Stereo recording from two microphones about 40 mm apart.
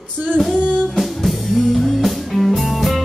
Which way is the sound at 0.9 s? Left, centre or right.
Centre.